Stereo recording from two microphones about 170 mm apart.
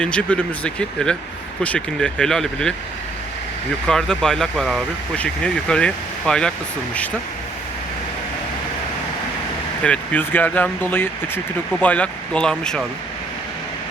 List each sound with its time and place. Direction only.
0.0 s speech: 5° left (ahead or behind)
3.8 s speech: 5° left (ahead or behind)
9.8 s speech: 5° left (ahead or behind)